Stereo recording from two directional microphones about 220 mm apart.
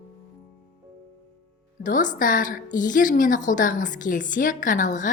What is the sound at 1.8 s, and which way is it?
A woman's voice, 35° left (ahead or behind).